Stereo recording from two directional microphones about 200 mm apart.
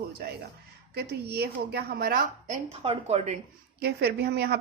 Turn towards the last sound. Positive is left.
turn(degrees=-55)  # may be behind; listen again after turning